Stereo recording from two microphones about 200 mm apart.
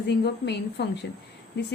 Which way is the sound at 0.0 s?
55° left (ahead or behind).